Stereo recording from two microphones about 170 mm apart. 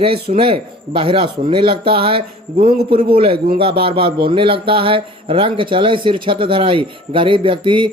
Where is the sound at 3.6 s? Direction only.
30° right (ahead or behind).